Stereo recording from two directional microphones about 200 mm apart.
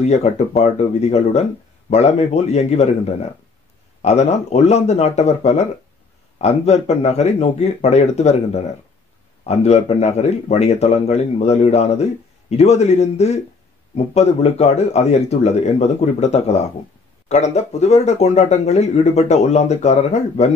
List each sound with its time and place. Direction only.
0.0 s speech: 35° left (ahead or behind)
9.5 s speech: 30° left (ahead or behind)